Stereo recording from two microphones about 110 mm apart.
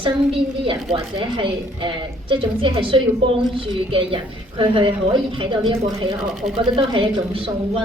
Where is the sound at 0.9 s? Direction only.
50° right (ahead or behind).